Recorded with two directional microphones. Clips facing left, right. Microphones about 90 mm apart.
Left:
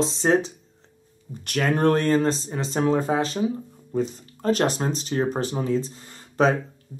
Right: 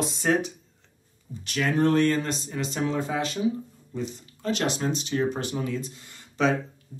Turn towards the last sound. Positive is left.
turn(degrees=25)  # may be behind; listen again after turning